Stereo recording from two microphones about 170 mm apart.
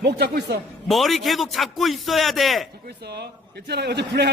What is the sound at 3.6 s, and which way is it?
Speech, 75° right (ahead or behind).